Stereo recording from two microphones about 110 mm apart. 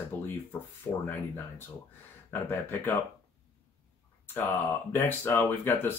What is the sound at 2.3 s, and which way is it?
Speech, 20° left (ahead or behind).